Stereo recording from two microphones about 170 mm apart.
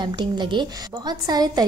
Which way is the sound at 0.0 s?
25° right (ahead or behind).